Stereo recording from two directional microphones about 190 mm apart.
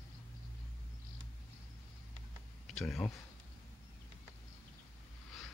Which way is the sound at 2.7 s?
5° left (ahead or behind).